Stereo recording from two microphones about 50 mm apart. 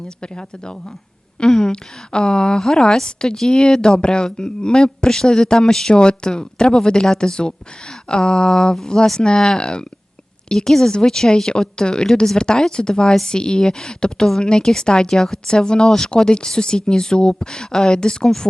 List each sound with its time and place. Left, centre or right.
0.2 s speech: centre